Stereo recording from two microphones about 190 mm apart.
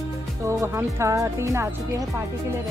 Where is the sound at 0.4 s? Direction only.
15° right (ahead or behind).